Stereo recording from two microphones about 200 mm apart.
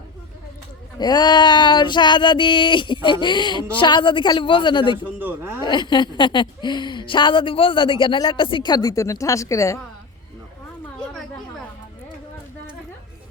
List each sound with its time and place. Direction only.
0.9 s a woman's voice: 20° left (ahead or behind)
5.2 s speech: 10° right (ahead or behind)
5.6 s a woman's voice: 20° left (ahead or behind)